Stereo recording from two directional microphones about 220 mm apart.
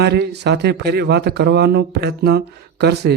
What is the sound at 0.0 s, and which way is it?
Speech, 50° right (ahead or behind).